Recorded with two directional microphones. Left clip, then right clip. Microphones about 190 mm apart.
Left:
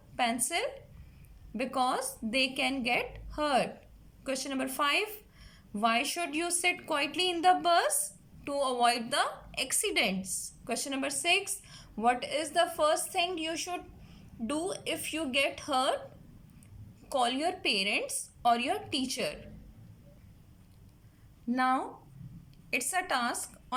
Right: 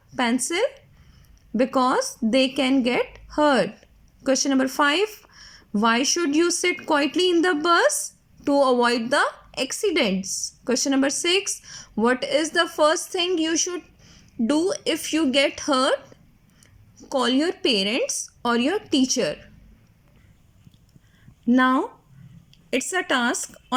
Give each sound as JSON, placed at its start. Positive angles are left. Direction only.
{"t": 0.4, "sound": "speech", "side_deg": -40}
{"t": 17.1, "sound": "speech", "side_deg": -40}
{"t": 21.5, "sound": "speech", "side_deg": -35}